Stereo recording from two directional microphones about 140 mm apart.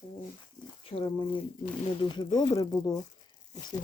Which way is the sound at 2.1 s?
30° left (ahead or behind).